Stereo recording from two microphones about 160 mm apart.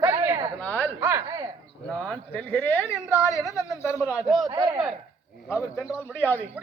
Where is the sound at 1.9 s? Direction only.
5° left (ahead or behind).